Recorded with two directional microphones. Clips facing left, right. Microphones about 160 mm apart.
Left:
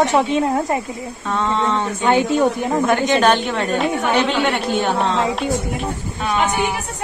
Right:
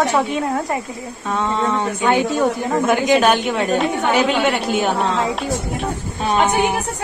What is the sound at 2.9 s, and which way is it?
A woman's voice, 5° right (ahead or behind).